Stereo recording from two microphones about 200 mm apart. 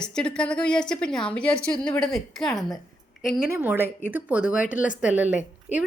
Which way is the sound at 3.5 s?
10° right (ahead or behind).